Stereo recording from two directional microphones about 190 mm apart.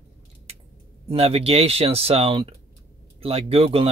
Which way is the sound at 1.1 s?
30° right (ahead or behind).